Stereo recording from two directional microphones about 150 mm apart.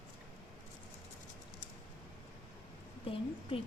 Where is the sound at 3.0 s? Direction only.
40° left (ahead or behind).